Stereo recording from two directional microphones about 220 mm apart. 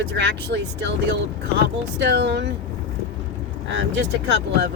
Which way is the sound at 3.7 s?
55° right (ahead or behind).